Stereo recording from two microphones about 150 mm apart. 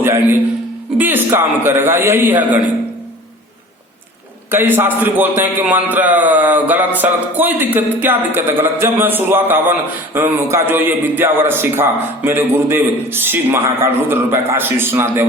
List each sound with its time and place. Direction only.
0.0 s a man's voice: 15° right (ahead or behind)
4.5 s a man's voice: 15° right (ahead or behind)